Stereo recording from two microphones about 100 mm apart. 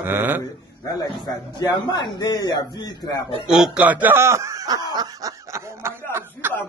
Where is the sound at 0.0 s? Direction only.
20° right (ahead or behind).